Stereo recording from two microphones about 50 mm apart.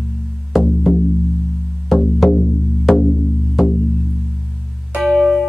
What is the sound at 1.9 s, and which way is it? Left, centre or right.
Music, centre.